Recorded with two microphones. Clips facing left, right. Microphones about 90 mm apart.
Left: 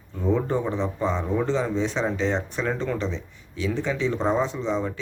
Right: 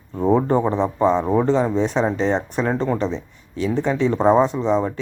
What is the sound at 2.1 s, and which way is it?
Speech, 45° right (ahead or behind).